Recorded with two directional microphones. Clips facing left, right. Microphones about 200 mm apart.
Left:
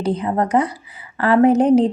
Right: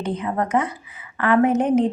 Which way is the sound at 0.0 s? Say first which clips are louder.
Left 4 dB; 35° left (ahead or behind).